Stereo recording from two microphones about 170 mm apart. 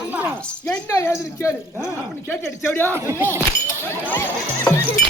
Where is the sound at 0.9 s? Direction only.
15° left (ahead or behind).